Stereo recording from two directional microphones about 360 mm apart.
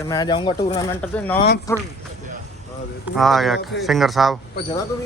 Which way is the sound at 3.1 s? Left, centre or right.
Centre.